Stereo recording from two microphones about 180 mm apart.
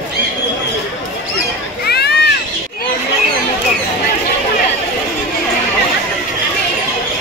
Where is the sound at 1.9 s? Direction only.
65° left (ahead or behind).